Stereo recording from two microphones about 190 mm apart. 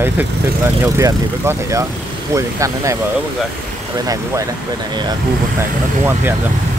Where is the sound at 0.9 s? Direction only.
15° right (ahead or behind).